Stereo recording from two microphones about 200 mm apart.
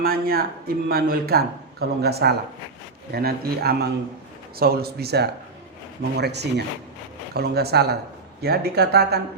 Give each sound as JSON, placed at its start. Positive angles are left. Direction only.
{"t": 0.0, "sound": "speech", "side_deg": -50}